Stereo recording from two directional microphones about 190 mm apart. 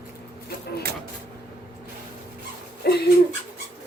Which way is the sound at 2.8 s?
60° left (ahead or behind).